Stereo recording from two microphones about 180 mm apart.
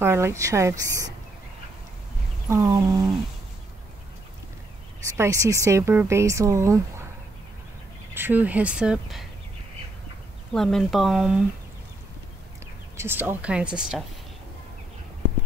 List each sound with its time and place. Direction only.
0.0 s speech: 15° right (ahead or behind)
2.5 s a sound: 20° right (ahead or behind)
5.1 s speech: 15° right (ahead or behind)
8.1 s speech: 10° right (ahead or behind)
10.5 s speech: centre (ahead or behind)
12.9 s speech: 10° right (ahead or behind)